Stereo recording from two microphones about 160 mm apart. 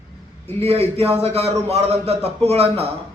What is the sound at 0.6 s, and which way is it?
A man's voice, 40° right (ahead or behind).